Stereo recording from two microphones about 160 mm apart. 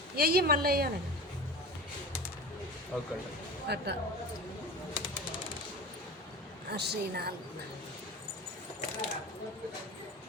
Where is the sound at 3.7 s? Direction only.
90° right.